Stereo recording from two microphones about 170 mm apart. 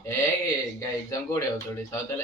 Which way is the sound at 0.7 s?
20° left (ahead or behind).